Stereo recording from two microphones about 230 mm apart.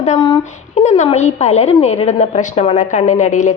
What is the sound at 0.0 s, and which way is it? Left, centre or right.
A woman's voice, left.